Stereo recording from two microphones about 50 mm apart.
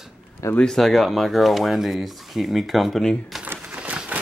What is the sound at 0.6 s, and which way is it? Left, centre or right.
Speech, centre.